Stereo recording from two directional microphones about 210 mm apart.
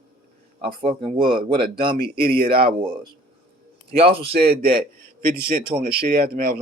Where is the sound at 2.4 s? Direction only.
45° right (ahead or behind).